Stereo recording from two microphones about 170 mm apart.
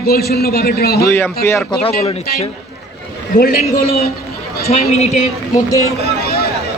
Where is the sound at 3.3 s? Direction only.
60° left (ahead or behind).